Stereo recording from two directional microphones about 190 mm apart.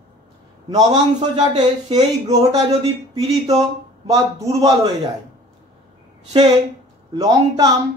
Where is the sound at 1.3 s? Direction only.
35° right (ahead or behind).